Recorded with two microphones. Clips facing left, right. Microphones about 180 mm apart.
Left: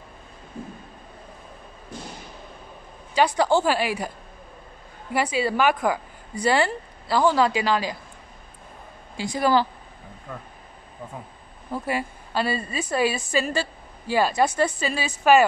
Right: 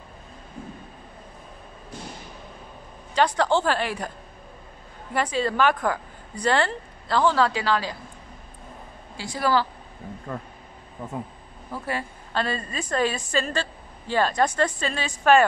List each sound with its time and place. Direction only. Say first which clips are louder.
3.2 s a woman's voice: left 1 dB; 10° left (ahead or behind)
5.1 s a woman's voice: left 1 dB; 10° left (ahead or behind)
9.1 s a woman's voice: left 2 dB; 15° left (ahead or behind)
11.7 s a woman's voice: left 3 dB; 10° left (ahead or behind)